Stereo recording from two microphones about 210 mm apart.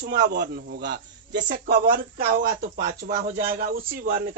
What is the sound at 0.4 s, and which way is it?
A man's voice, 50° right (ahead or behind).